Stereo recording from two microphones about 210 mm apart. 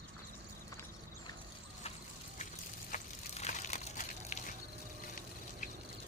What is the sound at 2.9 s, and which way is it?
Water, 35° left (ahead or behind).